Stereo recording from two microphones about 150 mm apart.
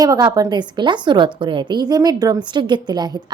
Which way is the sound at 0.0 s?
25° right (ahead or behind).